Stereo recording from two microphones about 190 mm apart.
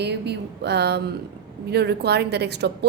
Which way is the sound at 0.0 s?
60° right (ahead or behind).